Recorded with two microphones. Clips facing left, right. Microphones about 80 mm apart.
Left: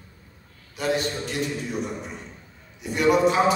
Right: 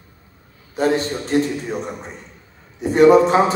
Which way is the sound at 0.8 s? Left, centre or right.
Right.